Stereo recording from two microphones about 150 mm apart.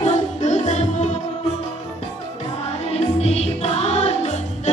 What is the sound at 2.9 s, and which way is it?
Music, 45° left (ahead or behind).